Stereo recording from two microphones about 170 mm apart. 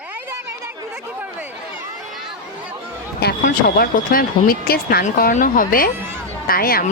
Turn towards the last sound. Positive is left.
turn(degrees=60)  # may be behind; listen again after turning